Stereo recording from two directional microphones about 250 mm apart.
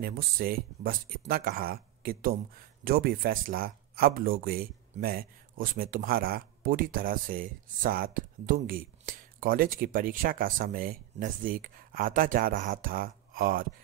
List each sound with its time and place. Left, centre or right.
0.0 s speech: right